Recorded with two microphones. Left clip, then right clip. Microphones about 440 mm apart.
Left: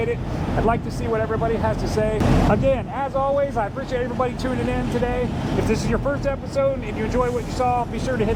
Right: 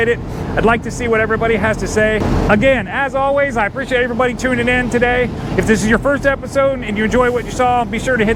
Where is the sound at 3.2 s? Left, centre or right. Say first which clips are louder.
Right 6 dB; right.